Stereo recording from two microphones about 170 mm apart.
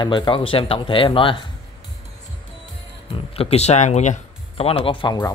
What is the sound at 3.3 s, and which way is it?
Speech, 35° left (ahead or behind).